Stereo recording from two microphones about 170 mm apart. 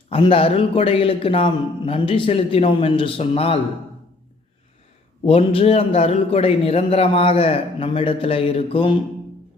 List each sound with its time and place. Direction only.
0.1 s a man's voice: 35° left (ahead or behind)
5.2 s a man's voice: 35° left (ahead or behind)